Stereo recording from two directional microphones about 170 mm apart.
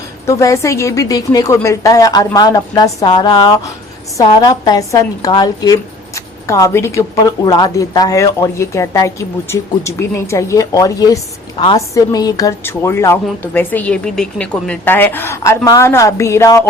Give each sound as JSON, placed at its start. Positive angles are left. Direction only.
{"t": 0.3, "sound": "a woman's voice", "side_deg": 15}